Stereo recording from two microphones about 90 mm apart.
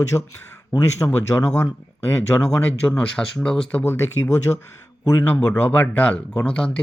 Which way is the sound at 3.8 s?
25° left (ahead or behind).